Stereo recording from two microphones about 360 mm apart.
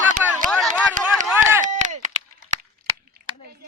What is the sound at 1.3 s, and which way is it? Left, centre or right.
Chop, centre.